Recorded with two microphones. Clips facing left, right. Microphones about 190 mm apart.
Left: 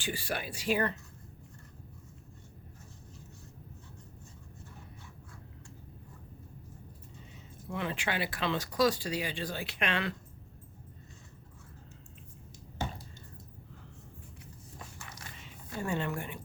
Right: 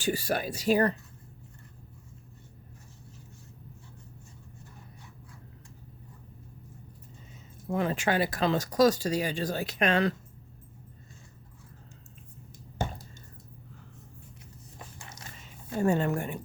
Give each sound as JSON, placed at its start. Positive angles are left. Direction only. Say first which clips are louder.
{"t": 0.0, "sound": "speech", "louder": "right 7 dB", "side_deg": -40}
{"t": 7.7, "sound": "speech", "louder": "right 7 dB", "side_deg": -40}
{"t": 12.8, "sound": "a sound", "louder": "right 4 dB", "side_deg": -50}
{"t": 15.8, "sound": "a woman's voice", "louder": "right 8 dB", "side_deg": -45}